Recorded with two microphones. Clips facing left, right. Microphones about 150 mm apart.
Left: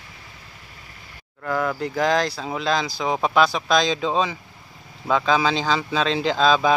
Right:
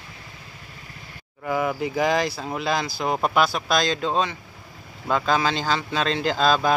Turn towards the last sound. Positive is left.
turn(degrees=-5)  # may be behind; listen again after turning